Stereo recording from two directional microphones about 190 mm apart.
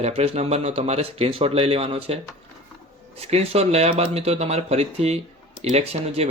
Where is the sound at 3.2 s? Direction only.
35° right (ahead or behind).